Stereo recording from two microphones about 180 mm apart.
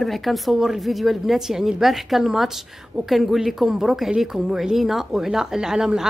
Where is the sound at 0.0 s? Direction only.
Centre (ahead or behind).